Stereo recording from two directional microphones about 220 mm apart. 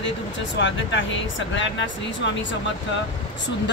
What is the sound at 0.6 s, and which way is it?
Speech, 55° left (ahead or behind).